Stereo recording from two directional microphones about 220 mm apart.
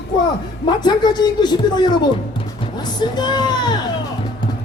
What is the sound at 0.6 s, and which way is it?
Speech, 20° left (ahead or behind).